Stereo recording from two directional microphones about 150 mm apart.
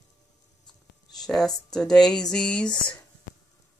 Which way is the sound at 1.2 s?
5° left (ahead or behind).